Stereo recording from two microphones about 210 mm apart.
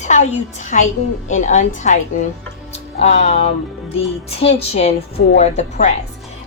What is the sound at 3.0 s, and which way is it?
A woman's voice, 30° left (ahead or behind).